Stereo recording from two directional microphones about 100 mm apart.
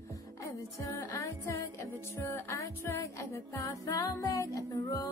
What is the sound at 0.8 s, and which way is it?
Music, 35° left (ahead or behind).